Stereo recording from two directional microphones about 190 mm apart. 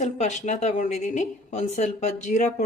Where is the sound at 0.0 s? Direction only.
40° left (ahead or behind).